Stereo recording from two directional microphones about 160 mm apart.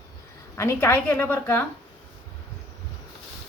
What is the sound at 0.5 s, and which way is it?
Speech, 15° left (ahead or behind).